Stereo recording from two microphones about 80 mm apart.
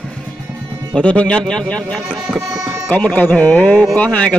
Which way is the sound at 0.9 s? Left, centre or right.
Centre.